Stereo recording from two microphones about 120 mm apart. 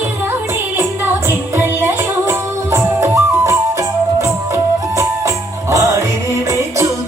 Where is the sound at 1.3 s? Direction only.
20° right (ahead or behind).